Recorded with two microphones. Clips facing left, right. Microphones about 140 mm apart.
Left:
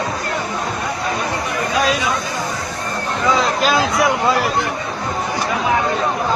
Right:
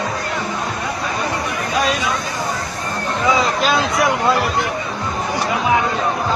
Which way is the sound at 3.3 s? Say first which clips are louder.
Left 1 dB; centre (ahead or behind).